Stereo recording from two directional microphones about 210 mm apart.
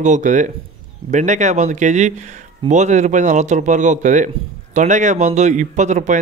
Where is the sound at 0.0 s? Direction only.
35° right (ahead or behind).